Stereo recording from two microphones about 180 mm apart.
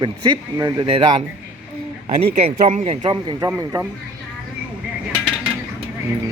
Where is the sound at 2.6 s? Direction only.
35° right (ahead or behind); by 3.8 s 20° right (ahead or behind).